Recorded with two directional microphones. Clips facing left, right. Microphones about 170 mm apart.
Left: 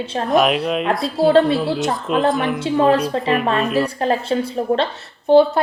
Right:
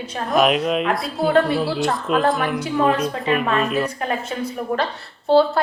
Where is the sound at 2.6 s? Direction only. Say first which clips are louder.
Left 5 dB; 35° left (ahead or behind).